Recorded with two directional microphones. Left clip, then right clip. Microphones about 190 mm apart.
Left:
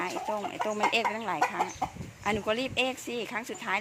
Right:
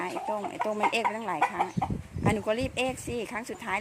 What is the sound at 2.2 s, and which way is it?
Speech, 15° right (ahead or behind).